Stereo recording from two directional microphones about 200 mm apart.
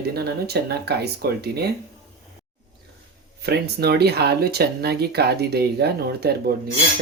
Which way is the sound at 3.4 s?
55° right (ahead or behind).